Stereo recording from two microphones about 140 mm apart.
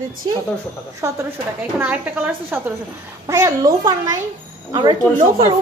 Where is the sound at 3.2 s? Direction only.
25° right (ahead or behind).